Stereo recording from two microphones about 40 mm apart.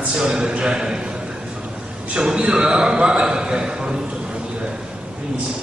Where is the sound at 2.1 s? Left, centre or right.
Right.